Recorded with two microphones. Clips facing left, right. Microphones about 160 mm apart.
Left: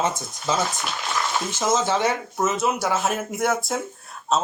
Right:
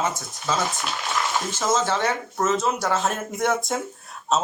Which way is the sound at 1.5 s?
15° left (ahead or behind).